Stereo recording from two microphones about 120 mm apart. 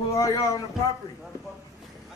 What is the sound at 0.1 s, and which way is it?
Speech, 25° left (ahead or behind).